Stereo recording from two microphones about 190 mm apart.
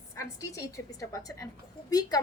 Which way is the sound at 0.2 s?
15° left (ahead or behind).